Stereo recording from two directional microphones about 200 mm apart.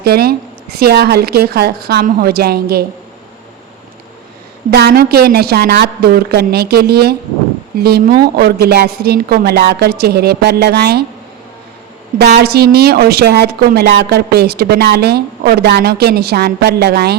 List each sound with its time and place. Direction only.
0.0 s speech: 50° right (ahead or behind)
4.7 s speech: 50° right (ahead or behind)
12.2 s speech: 55° right (ahead or behind)